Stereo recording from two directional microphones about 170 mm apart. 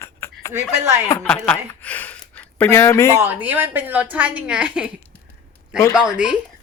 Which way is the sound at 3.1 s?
10° right (ahead or behind).